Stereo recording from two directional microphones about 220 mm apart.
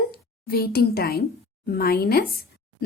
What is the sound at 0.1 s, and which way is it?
Speech, 45° left (ahead or behind).